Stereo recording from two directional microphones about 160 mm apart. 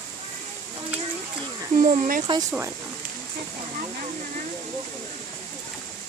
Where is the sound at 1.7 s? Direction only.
50° right (ahead or behind).